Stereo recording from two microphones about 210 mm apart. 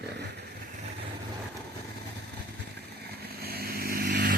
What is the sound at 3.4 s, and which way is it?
Vehicle, 45° right (ahead or behind).